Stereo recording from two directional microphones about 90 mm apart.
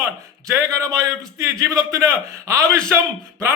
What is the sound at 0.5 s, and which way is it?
A man's voice, 40° right (ahead or behind).